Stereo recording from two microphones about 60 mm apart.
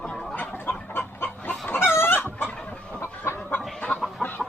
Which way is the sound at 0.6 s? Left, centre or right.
Left.